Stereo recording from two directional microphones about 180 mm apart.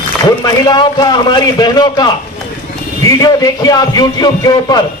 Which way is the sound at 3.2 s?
20° left (ahead or behind).